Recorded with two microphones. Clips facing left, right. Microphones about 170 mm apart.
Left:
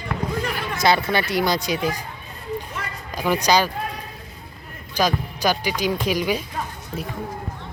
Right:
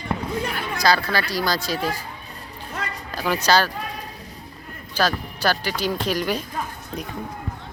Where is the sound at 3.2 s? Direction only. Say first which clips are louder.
Left 1 dB; 15° left (ahead or behind).